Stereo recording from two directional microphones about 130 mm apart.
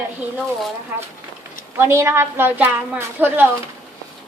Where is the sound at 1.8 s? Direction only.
20° right (ahead or behind).